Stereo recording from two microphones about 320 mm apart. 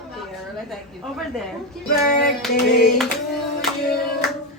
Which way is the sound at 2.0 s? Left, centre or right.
Left.